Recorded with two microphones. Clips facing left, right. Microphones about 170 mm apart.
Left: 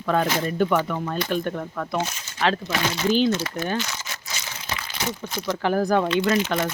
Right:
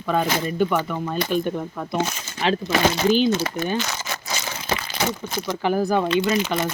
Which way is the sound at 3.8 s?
90° right.